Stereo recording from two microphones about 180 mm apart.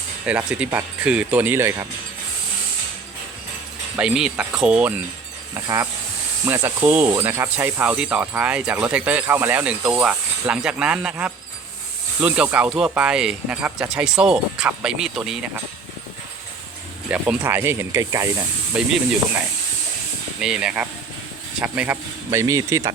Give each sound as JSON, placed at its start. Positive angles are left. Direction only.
{"t": 0.3, "sound": "speech", "side_deg": -5}
{"t": 3.9, "sound": "speech", "side_deg": -5}
{"t": 5.5, "sound": "speech", "side_deg": -15}
{"t": 17.1, "sound": "speech", "side_deg": -10}
{"t": 18.7, "sound": "speech", "side_deg": -5}
{"t": 20.4, "sound": "speech", "side_deg": -5}